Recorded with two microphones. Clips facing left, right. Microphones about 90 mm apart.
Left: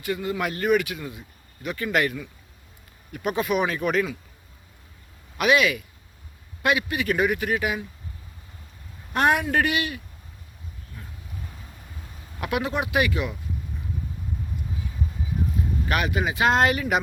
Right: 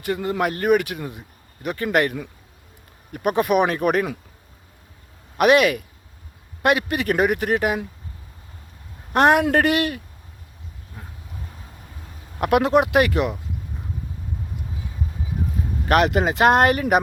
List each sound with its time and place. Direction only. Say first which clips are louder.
0.0 s speech: right 4 dB; 45° right (ahead or behind)
5.4 s speech: right 5 dB; 50° right (ahead or behind)
9.1 s speech: right 5 dB; 65° right (ahead or behind)
12.4 s speech: right 9 dB; 60° right (ahead or behind)
15.9 s speech: right 9 dB; 60° right (ahead or behind)